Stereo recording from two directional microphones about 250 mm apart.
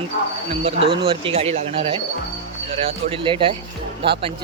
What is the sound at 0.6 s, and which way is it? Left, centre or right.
Speech, right.